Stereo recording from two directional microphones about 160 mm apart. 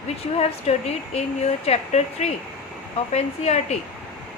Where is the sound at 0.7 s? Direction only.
45° left (ahead or behind).